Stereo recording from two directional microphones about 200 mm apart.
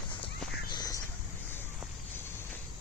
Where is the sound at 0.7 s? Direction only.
20° left (ahead or behind).